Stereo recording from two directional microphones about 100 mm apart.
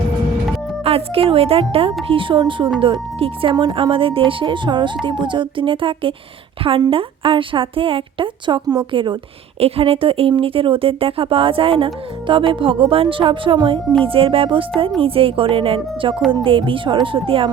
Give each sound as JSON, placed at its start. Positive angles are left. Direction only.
{"t": 0.9, "sound": "speech", "side_deg": -75}
{"t": 2.0, "sound": "speech", "side_deg": -60}
{"t": 3.5, "sound": "a woman's voice", "side_deg": -55}
{"t": 9.6, "sound": "speech", "side_deg": -75}